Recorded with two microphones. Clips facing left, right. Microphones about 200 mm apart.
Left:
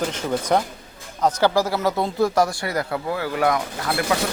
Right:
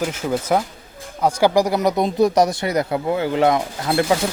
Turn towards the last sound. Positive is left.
turn(degrees=-25)  # may be behind; listen again after turning